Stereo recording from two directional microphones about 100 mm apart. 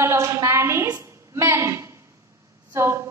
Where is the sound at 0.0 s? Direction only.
30° right (ahead or behind).